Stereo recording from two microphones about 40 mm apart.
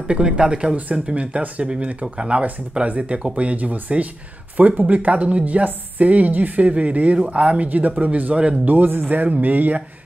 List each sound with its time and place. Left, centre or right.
0.1 s speech: right
0.7 s a woman's voice: right
8.6 s speech: right